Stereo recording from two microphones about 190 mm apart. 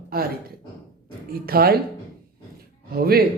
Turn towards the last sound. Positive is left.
turn(degrees=-55)  # may be behind; listen again after turning